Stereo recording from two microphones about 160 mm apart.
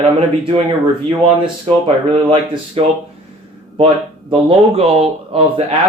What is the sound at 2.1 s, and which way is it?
Speech, 40° right (ahead or behind).